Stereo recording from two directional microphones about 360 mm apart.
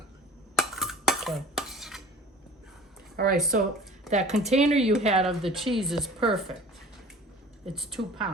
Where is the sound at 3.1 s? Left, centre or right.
Right.